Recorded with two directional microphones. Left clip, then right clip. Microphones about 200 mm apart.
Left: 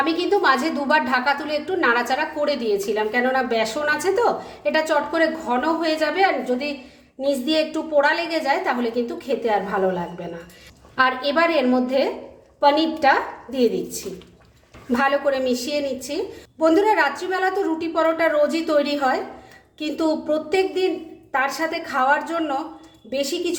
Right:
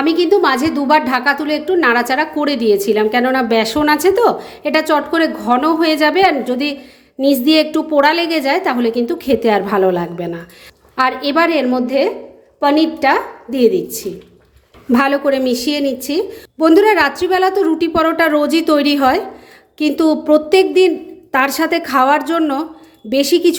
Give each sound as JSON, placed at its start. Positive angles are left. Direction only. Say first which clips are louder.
{"t": 0.0, "sound": "a woman's voice", "louder": "right 6 dB", "side_deg": -35}
{"t": 10.9, "sound": "a woman's voice", "louder": "right 5 dB", "side_deg": -35}